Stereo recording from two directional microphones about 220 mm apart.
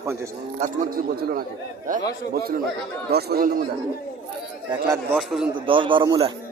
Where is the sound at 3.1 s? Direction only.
45° right (ahead or behind).